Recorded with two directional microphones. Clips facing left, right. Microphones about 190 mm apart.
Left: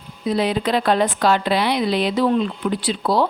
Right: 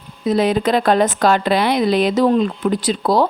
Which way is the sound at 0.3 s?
45° right (ahead or behind).